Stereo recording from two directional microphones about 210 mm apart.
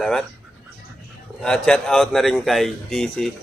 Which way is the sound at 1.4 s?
5° left (ahead or behind).